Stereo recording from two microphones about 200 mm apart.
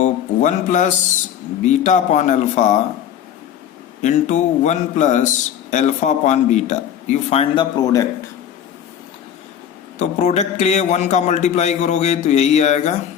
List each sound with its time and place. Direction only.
0.0 s a sound: 40° left (ahead or behind)
1.6 s a man's voice: 40° left (ahead or behind)
4.0 s a man's voice: 35° left (ahead or behind); by 8.0 s 20° left (ahead or behind)
10.0 s a man's voice: 35° left (ahead or behind)